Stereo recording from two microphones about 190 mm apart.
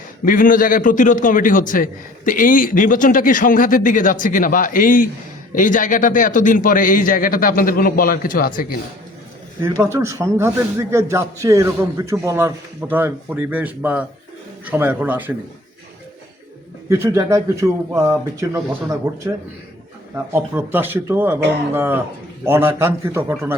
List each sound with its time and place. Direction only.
0.3 s a man's voice: 45° left (ahead or behind)
9.6 s a man's voice: 15° right (ahead or behind)
16.9 s a man's voice: 15° right (ahead or behind)